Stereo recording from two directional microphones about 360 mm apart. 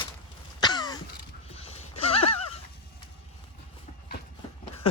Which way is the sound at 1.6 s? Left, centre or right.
Centre.